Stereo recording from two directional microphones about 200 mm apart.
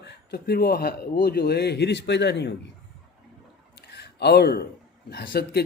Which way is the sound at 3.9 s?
55° left (ahead or behind).